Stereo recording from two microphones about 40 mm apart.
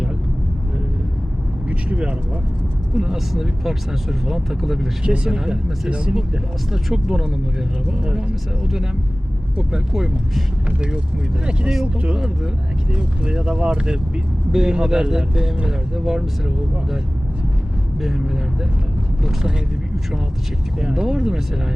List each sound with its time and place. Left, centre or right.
2.9 s speech: centre
5.0 s speech: right
6.7 s speech: centre
9.9 s speech: centre
10.7 s speech: right
19.2 s speech: centre
20.7 s speech: centre